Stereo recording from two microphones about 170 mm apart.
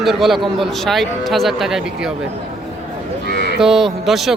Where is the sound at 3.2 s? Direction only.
70° left (ahead or behind).